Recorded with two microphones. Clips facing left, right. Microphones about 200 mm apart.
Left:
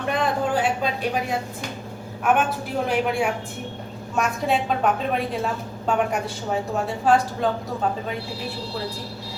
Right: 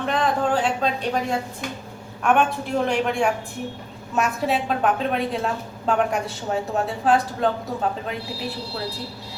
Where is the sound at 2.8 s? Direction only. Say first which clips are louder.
Even; 5° left (ahead or behind).